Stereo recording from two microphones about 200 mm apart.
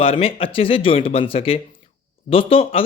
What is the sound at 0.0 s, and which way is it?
Speech, 30° left (ahead or behind).